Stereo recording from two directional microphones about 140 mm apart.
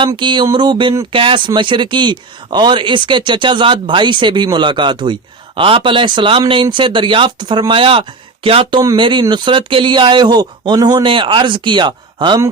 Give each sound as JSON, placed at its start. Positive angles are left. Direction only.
{"t": 0.2, "sound": "speech", "side_deg": -35}
{"t": 8.8, "sound": "speech", "side_deg": -30}